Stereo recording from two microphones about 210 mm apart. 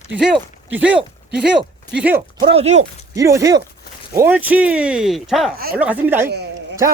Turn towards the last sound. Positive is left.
turn(degrees=-50)  # may be behind; listen again after turning